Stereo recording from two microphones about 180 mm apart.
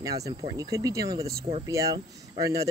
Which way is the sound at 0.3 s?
30° right (ahead or behind).